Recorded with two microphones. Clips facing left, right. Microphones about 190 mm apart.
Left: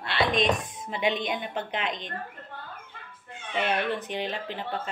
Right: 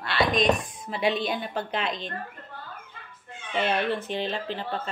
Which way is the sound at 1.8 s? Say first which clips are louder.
Right 2 dB; 30° right (ahead or behind).